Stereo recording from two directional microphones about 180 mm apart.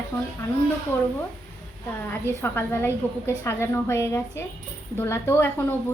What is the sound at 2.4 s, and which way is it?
A woman's voice, 10° left (ahead or behind).